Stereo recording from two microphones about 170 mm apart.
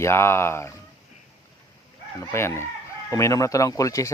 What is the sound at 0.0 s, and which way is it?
Speech, 15° left (ahead or behind).